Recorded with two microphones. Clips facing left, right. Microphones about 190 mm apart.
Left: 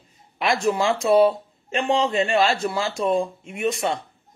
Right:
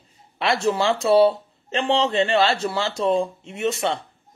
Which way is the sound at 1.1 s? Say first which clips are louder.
Right 1 dB; 30° right (ahead or behind).